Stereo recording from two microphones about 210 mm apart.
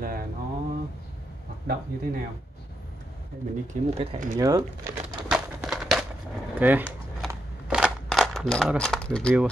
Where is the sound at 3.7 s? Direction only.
35° right (ahead or behind).